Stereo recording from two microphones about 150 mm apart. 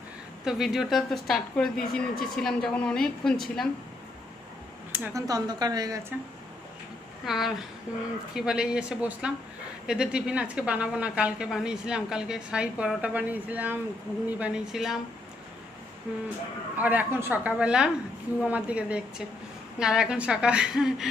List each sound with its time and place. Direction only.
0.4 s a woman's voice: centre (ahead or behind)
4.9 s speech: 15° right (ahead or behind)
7.3 s a woman's voice: centre (ahead or behind)
16.7 s a woman's voice: 10° right (ahead or behind)